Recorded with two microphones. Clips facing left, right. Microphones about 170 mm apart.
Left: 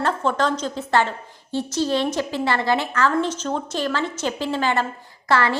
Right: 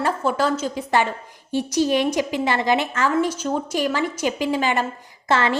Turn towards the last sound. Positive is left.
turn(degrees=-20)  # may be behind; listen again after turning